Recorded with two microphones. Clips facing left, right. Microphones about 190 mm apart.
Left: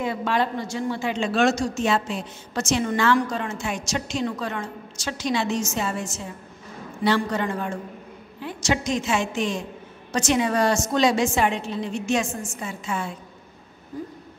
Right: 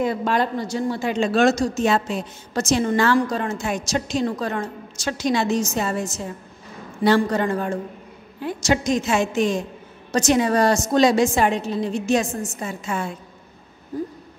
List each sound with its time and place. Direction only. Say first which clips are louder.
0.0 s a woman's voice: right 3 dB; 40° right (ahead or behind)